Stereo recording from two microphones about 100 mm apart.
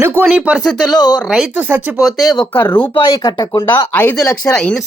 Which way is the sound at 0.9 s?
45° left (ahead or behind).